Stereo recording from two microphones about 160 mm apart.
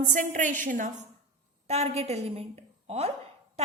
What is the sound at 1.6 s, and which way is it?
A woman's voice, 40° right (ahead or behind).